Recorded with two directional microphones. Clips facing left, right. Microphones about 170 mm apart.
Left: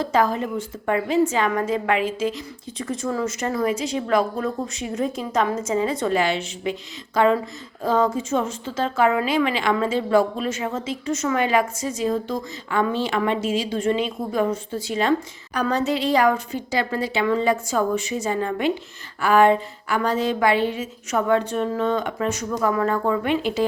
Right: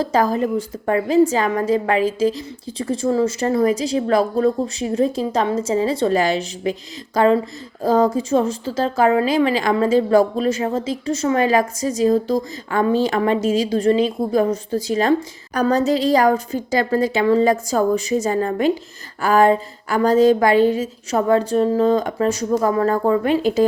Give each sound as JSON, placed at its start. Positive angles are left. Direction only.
{"t": 0.0, "sound": "speech", "side_deg": -40}